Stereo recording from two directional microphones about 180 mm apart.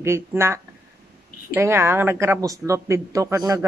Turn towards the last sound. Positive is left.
turn(degrees=-20)  # may be behind; listen again after turning